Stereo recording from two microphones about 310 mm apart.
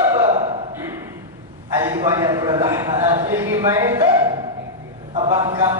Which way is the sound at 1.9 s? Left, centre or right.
Centre.